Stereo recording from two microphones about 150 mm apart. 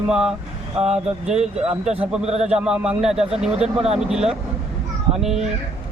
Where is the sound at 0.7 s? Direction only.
45° right (ahead or behind).